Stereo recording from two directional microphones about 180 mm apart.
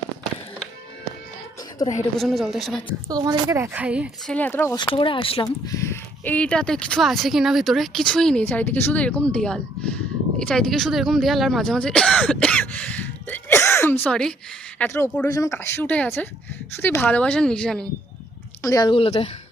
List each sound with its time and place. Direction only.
2.1 s speech: centre (ahead or behind)
3.1 s a woman's voice: 20° right (ahead or behind)
4.3 s speech: 10° left (ahead or behind)
4.8 s speech: 30° left (ahead or behind); by 17.8 s 5° left (ahead or behind)
18.6 s a woman's voice: 20° left (ahead or behind)